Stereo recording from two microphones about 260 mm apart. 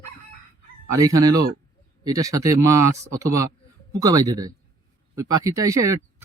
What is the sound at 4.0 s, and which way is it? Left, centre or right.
Speech, centre.